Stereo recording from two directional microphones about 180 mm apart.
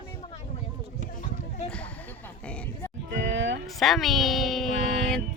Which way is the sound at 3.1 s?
90° right.